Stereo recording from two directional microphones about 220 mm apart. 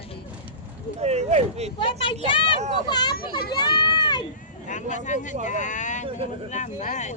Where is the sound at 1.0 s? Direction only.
30° right (ahead or behind).